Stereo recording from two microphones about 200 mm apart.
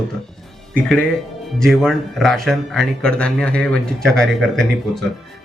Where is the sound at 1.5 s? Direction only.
Centre (ahead or behind).